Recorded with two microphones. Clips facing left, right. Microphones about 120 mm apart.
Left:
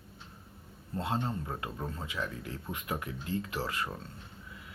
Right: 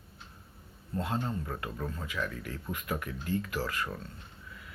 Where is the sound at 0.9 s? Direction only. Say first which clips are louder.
Even; 30° left (ahead or behind).